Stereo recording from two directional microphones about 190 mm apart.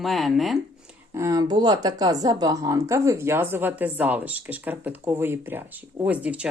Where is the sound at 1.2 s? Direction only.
15° right (ahead or behind).